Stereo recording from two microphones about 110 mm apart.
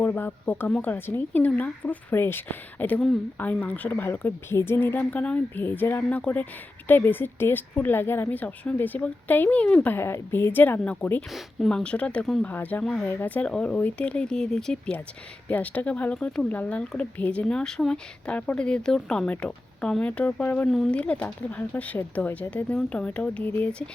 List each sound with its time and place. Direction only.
0.0 s speech: 15° left (ahead or behind)
11.3 s speech: 5° left (ahead or behind)
20.7 s speech: centre (ahead or behind)
21.0 s speech: 15° left (ahead or behind)